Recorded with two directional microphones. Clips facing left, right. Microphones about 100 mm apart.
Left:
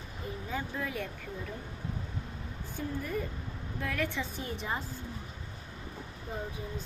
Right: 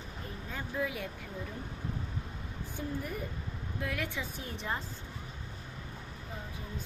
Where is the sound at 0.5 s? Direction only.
5° right (ahead or behind).